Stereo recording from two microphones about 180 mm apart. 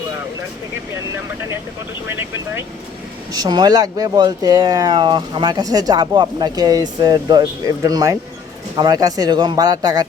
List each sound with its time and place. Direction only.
2.0 s speech: 10° right (ahead or behind)